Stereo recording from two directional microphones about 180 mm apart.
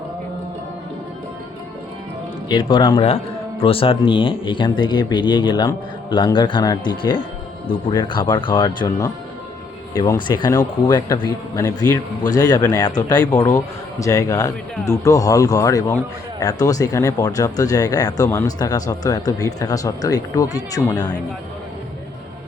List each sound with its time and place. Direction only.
2.5 s speech: 25° left (ahead or behind)